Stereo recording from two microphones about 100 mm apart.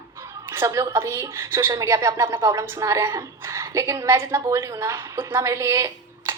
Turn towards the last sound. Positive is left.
turn(degrees=-30)  # may be behind; listen again after turning